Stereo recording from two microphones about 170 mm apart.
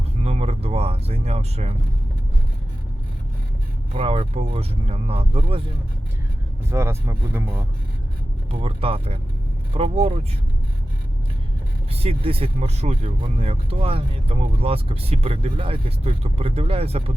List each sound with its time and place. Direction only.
0.2 s speech: 40° right (ahead or behind)
3.9 s speech: 35° right (ahead or behind)
6.7 s speech: 15° right (ahead or behind)
8.4 s speech: 35° right (ahead or behind)
11.9 s speech: 35° right (ahead or behind)